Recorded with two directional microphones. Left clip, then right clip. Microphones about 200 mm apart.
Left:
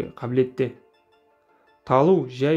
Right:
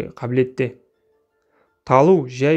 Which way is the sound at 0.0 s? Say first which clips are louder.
Right 3 dB; 30° right (ahead or behind).